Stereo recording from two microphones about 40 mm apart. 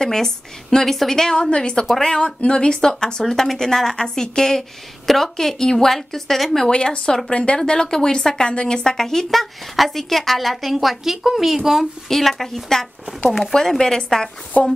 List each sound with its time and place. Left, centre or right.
0.0 s a woman's voice: centre
3.3 s a woman's voice: centre
6.7 s a woman's voice: left; by 11.9 s centre
12.1 s a woman's voice: centre
13.4 s a woman's voice: centre
14.5 s speech: left